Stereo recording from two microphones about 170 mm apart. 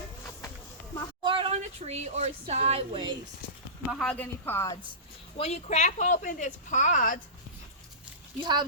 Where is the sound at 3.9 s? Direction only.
5° left (ahead or behind).